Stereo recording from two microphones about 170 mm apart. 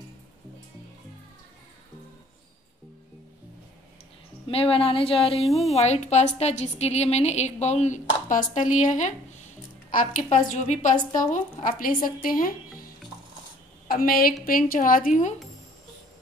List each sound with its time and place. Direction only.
4.5 s a woman's voice: 35° left (ahead or behind)
5.4 s speech: centre (ahead or behind)
5.8 s a woman's voice: 40° left (ahead or behind); by 12.5 s 55° left (ahead or behind)
13.8 s speech: 60° left (ahead or behind)